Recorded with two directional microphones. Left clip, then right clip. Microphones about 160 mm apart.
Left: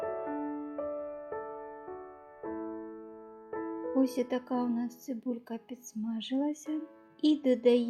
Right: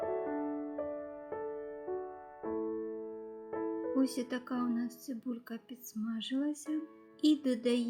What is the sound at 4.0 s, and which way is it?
A woman's voice, 15° left (ahead or behind).